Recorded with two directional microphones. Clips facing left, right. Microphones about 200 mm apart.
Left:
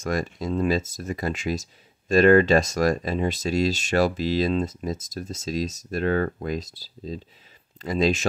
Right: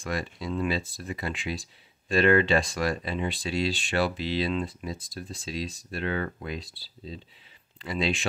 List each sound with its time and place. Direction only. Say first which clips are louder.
0.0 s speech: left 5 dB; 45° left (ahead or behind)